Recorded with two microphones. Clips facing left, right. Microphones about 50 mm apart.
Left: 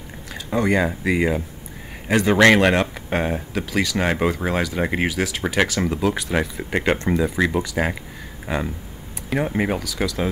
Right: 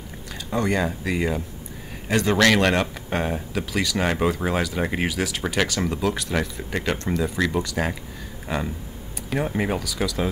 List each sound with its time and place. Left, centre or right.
0.3 s speech: centre
6.7 s speech: left; by 10.3 s centre